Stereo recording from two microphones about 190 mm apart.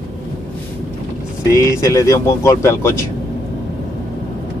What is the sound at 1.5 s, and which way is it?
Speech, 15° left (ahead or behind).